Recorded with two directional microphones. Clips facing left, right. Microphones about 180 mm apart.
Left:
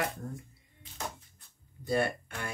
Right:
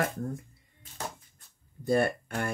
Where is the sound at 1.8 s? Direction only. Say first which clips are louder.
Right 4 dB; 50° right (ahead or behind).